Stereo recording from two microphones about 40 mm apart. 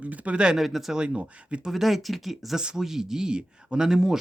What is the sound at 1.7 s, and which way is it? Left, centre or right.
Speech, centre.